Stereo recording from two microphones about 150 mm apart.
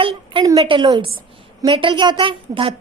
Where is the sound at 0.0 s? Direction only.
35° right (ahead or behind).